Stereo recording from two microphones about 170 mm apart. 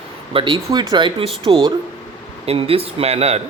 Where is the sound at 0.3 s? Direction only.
30° right (ahead or behind).